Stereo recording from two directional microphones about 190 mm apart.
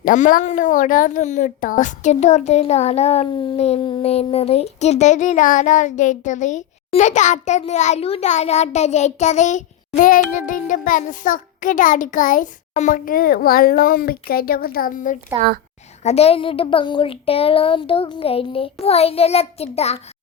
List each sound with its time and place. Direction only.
0.0 s a woman's voice: 45° left (ahead or behind)
16.0 s speech: 35° left (ahead or behind)